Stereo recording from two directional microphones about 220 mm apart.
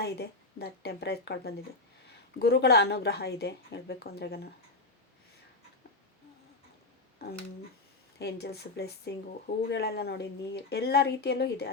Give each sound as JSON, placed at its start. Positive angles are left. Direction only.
{"t": 0.0, "sound": "speech", "side_deg": 45}
{"t": 7.2, "sound": "speech", "side_deg": 45}